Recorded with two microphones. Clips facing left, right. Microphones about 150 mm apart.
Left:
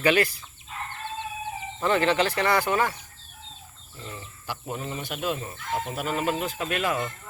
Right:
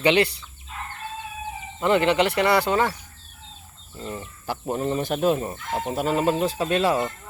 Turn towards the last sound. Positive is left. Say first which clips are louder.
# right 6 dB
turn(degrees=-30)  # may be behind; listen again after turning